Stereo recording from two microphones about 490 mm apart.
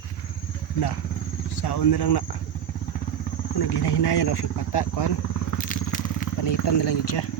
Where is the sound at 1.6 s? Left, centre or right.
Left.